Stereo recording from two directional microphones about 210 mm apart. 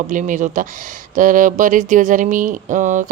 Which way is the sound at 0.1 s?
35° right (ahead or behind).